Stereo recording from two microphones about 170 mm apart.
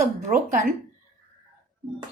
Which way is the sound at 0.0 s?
50° right (ahead or behind).